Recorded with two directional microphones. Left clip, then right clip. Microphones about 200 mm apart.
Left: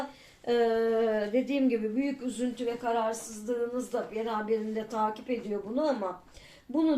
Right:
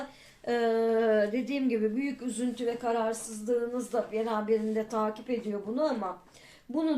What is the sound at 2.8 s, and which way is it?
A woman's voice, 25° right (ahead or behind).